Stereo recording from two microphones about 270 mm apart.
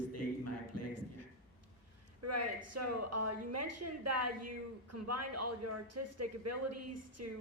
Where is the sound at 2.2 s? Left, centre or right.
Right.